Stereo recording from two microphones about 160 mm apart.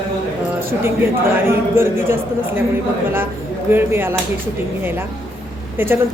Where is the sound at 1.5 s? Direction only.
15° right (ahead or behind).